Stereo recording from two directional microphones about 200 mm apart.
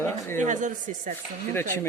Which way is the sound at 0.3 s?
40° right (ahead or behind).